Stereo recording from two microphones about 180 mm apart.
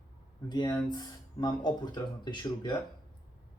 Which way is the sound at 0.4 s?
25° left (ahead or behind).